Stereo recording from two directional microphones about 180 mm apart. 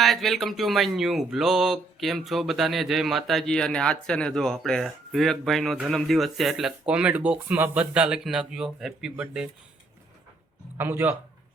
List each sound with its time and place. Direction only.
0.0 s speech: centre (ahead or behind)
10.8 s speech: 10° right (ahead or behind)